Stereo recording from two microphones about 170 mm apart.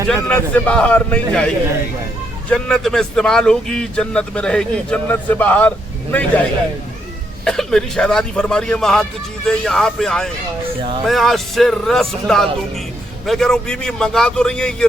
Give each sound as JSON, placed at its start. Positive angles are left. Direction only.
{"t": 0.3, "sound": "speech", "side_deg": 10}
{"t": 2.5, "sound": "speech", "side_deg": 5}
{"t": 7.4, "sound": "a man's voice", "side_deg": 5}